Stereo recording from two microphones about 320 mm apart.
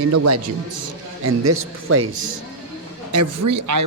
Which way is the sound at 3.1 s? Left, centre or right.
Right.